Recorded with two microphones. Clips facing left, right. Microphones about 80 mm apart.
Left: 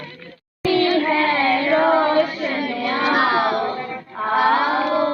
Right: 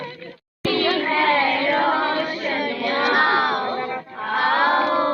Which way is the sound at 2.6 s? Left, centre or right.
Right.